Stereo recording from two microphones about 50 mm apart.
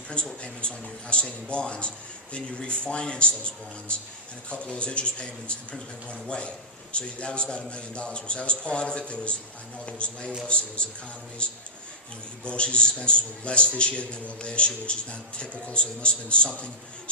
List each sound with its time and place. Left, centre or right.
0.4 s a man's voice: left